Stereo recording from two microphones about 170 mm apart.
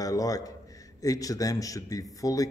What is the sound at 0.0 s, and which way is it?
A man's voice, 20° left (ahead or behind).